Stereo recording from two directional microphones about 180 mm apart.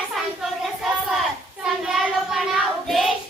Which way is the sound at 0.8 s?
Centre (ahead or behind).